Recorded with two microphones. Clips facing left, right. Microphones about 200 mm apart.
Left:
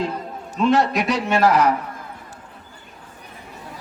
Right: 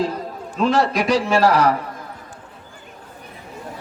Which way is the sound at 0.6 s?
Centre (ahead or behind).